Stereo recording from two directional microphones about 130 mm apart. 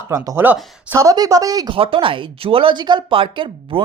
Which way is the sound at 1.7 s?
45° right (ahead or behind).